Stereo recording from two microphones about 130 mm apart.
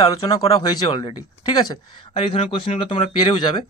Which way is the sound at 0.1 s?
30° left (ahead or behind).